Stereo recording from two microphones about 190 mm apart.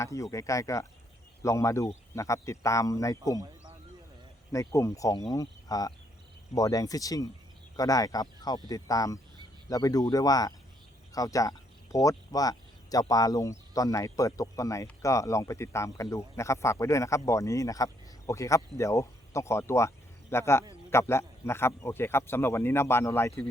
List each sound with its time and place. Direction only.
0.0 s speech: 15° left (ahead or behind)
4.5 s speech: 15° left (ahead or behind)